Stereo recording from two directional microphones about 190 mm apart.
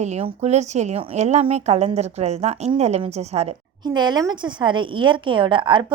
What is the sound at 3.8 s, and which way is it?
A woman's voice, 20° right (ahead or behind).